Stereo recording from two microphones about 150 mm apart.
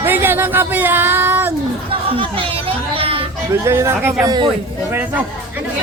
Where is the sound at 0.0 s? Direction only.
15° right (ahead or behind).